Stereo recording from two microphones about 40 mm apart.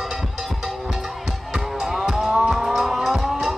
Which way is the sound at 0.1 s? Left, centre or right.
Centre.